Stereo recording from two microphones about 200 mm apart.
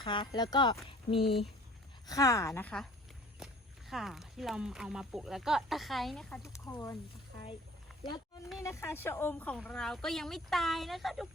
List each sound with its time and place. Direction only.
0.0 s speech: 25° left (ahead or behind)
2.0 s speech: 15° left (ahead or behind)
8.6 s speech: 15° left (ahead or behind)